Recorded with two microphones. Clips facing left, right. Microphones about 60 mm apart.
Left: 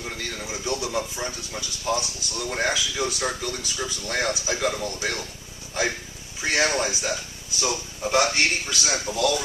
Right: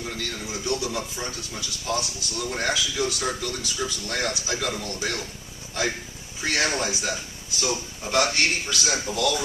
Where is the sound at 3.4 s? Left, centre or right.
Left.